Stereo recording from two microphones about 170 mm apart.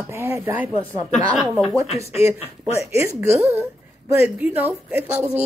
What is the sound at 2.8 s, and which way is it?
Speech, 15° right (ahead or behind).